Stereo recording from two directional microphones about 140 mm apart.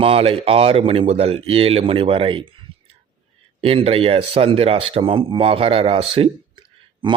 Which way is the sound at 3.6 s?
45° right (ahead or behind).